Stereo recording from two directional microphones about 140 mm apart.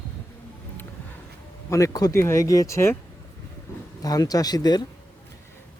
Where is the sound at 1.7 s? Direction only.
25° left (ahead or behind).